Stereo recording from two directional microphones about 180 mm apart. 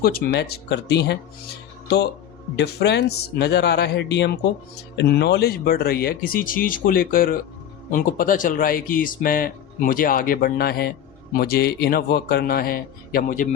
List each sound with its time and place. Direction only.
0.0 s a man's voice: 60° left (ahead or behind)
2.6 s a man's voice: 70° left (ahead or behind); by 13.5 s 45° left (ahead or behind)